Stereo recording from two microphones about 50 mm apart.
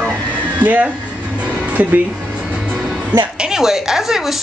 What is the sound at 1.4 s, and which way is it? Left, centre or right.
Music, right.